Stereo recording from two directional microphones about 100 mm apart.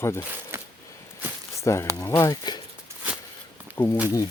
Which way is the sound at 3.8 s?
35° left (ahead or behind).